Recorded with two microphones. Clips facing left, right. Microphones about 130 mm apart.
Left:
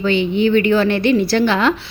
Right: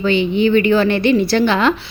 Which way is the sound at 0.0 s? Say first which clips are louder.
Right 1 dB; 20° right (ahead or behind).